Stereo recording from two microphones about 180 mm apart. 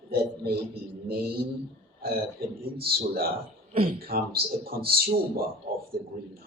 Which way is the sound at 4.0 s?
60° right (ahead or behind).